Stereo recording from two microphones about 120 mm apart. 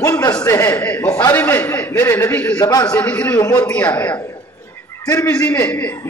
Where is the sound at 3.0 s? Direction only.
10° left (ahead or behind).